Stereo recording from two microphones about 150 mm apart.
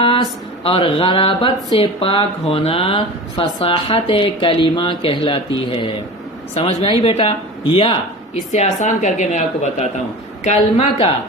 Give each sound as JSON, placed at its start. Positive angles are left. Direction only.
{"t": 0.6, "sound": "speech", "side_deg": 40}
{"t": 8.8, "sound": "speech", "side_deg": 50}